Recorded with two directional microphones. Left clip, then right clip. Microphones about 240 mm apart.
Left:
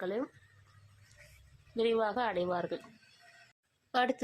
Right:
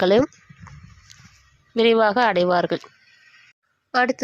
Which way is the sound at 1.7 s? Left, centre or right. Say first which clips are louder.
Right 14 dB; right.